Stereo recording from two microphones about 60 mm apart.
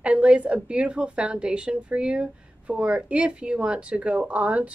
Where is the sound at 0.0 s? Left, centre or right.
Right.